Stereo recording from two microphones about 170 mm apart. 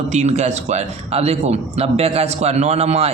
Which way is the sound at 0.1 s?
40° right (ahead or behind).